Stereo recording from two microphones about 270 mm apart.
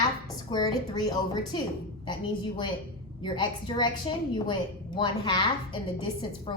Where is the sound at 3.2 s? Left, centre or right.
Centre.